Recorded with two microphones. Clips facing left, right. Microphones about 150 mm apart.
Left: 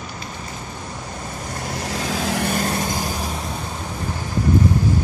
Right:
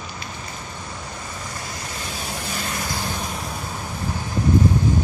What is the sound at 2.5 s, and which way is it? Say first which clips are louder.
Vehicle: left 7 dB; 40° left (ahead or behind).